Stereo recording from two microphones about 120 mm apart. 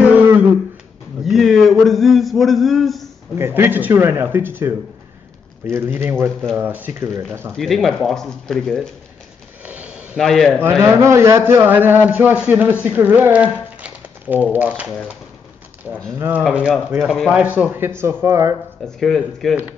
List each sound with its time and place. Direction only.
1.2 s a man's voice: centre (ahead or behind)
3.3 s a man's voice: 20° right (ahead or behind)
5.9 s a man's voice: 15° right (ahead or behind)
7.5 s speech: centre (ahead or behind)
9.7 s a sound: 10° right (ahead or behind)
10.2 s speech: centre (ahead or behind)
10.8 s a man's voice: 20° right (ahead or behind)
16.2 s a man's voice: 15° right (ahead or behind)
18.9 s speech: 5° left (ahead or behind)